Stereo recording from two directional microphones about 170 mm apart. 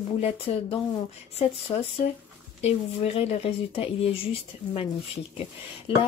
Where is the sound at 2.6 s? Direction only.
35° left (ahead or behind).